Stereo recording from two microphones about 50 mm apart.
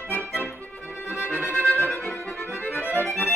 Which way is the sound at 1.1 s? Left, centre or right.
Right.